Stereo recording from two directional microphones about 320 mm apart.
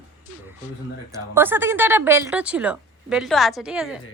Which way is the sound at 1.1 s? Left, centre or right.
Centre.